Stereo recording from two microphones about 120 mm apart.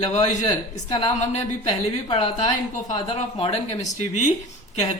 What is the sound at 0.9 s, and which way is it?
Speech, 60° left (ahead or behind).